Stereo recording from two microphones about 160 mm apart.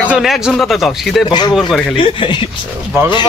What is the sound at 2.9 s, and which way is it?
Speech, 15° right (ahead or behind).